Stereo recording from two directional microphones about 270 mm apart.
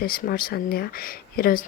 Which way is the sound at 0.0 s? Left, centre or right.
Left.